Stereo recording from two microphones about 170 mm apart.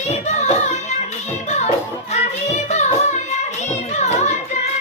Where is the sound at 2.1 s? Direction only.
40° left (ahead or behind).